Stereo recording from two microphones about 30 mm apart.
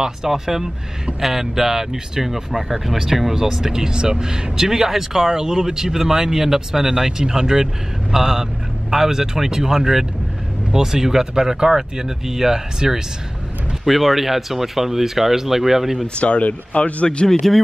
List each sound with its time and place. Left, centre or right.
0.3 s speech: centre
3.7 s speech: right
13.8 s speech: centre
16.2 s speech: left